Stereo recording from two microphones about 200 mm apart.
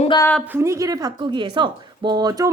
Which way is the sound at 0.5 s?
15° right (ahead or behind).